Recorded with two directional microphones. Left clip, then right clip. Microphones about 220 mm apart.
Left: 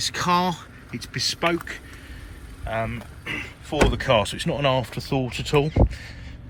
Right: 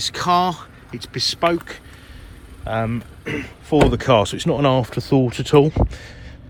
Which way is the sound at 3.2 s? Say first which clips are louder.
Right 1 dB; 35° right (ahead or behind).